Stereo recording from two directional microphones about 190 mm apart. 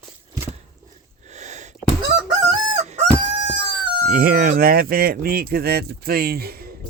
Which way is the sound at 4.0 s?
45° right (ahead or behind).